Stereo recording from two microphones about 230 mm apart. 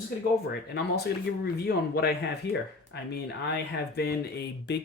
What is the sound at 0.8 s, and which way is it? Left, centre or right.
Speech, left.